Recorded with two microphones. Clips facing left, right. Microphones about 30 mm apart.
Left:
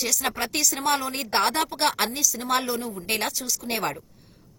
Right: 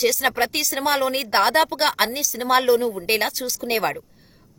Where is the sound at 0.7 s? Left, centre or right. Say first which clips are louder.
Right 4 dB; right.